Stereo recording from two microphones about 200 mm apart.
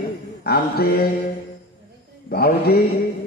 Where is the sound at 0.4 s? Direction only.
50° left (ahead or behind).